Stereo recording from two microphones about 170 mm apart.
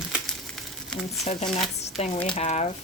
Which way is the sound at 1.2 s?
40° left (ahead or behind).